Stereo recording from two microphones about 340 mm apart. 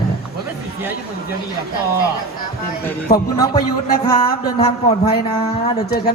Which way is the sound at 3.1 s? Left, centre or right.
Centre.